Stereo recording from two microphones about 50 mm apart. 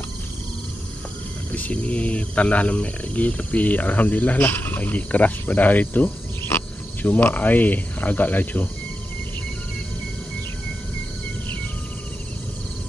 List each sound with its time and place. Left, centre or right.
1.5 s speech: left